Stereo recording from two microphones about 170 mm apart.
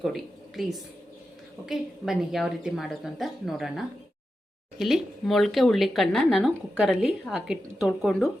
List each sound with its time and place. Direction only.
0.0 s a woman's voice: centre (ahead or behind)